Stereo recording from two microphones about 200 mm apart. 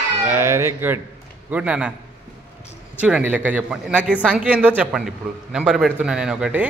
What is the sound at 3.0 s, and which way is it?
A man's voice, 5° right (ahead or behind).